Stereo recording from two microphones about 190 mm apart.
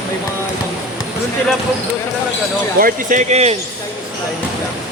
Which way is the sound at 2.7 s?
45° right (ahead or behind).